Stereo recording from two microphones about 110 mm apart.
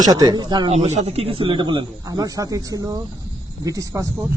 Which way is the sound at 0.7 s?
80° right.